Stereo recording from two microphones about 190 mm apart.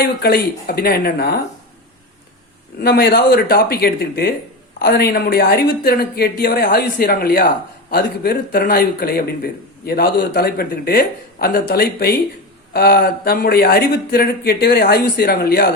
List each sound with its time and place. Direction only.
0.0 s speech: 55° left (ahead or behind)
2.8 s speech: 55° left (ahead or behind)